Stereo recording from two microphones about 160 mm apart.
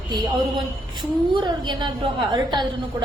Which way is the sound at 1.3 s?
30° right (ahead or behind).